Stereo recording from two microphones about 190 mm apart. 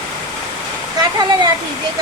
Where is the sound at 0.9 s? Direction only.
20° right (ahead or behind).